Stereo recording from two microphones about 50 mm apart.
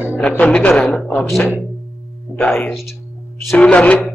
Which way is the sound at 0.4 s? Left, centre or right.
Left.